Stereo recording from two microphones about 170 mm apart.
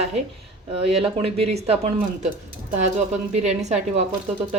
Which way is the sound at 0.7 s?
35° right (ahead or behind).